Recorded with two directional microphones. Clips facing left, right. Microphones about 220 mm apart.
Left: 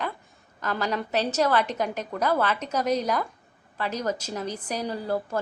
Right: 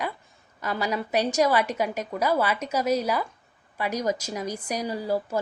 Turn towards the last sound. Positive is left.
turn(degrees=-10)  # may be behind; listen again after turning